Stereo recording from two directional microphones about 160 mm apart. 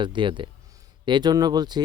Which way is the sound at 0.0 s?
30° right (ahead or behind).